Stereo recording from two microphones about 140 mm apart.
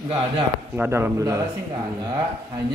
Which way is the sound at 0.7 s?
15° right (ahead or behind).